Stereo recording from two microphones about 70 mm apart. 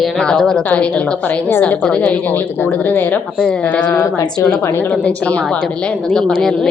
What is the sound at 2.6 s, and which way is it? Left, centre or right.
Speech, left.